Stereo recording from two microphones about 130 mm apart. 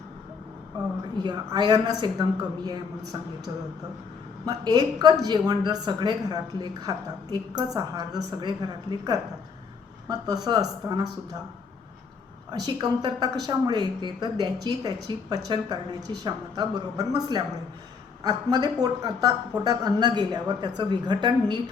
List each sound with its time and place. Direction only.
1.2 s a woman's voice: 35° right (ahead or behind)
12.5 s a woman's voice: 30° right (ahead or behind)